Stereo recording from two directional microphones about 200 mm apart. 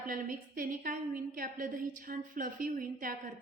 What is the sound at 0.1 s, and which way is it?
A woman's voice, 45° right (ahead or behind).